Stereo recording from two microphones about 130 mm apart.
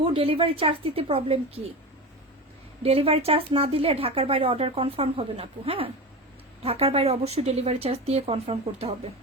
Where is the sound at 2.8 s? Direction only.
50° right (ahead or behind).